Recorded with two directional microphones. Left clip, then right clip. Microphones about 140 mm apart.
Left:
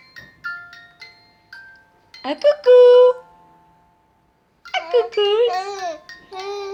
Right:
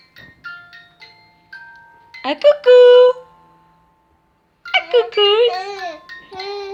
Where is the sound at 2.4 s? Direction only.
10° right (ahead or behind).